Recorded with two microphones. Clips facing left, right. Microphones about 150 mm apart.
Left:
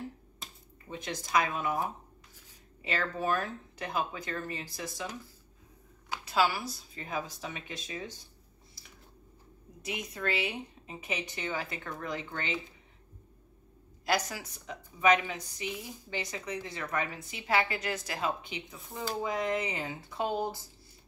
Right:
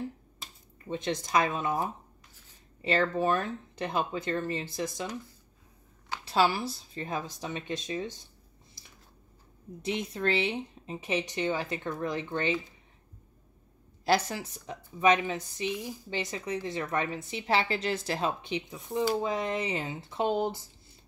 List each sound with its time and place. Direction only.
0.8 s a woman's voice: 25° right (ahead or behind)
2.8 s a woman's voice: 30° right (ahead or behind)
6.2 s a woman's voice: 30° right (ahead or behind)
9.8 s a woman's voice: 30° right (ahead or behind)
14.0 s a woman's voice: 25° right (ahead or behind)